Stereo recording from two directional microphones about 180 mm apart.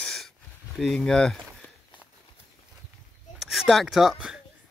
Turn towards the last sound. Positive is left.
turn(degrees=-5)  # may be behind; listen again after turning